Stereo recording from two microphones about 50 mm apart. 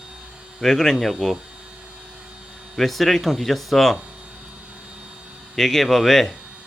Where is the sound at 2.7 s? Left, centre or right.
Centre.